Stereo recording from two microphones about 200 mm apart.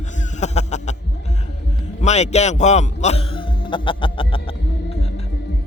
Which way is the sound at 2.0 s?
35° left (ahead or behind).